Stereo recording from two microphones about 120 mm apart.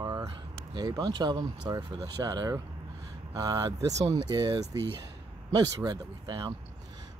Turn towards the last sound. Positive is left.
turn(degrees=-35)  # may be behind; listen again after turning